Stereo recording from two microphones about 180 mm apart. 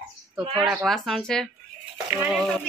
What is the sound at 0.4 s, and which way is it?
Speech, 30° right (ahead or behind).